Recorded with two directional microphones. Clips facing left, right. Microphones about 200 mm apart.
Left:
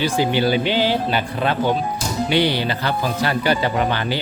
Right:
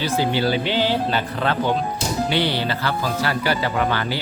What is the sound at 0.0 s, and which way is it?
Speech, 15° left (ahead or behind).